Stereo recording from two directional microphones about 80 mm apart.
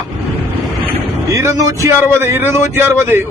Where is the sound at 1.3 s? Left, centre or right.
Right.